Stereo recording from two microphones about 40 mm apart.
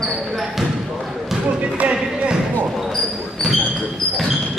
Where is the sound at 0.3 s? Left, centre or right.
Centre.